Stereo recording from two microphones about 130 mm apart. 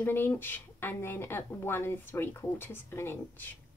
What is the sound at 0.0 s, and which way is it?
Speech, 15° left (ahead or behind).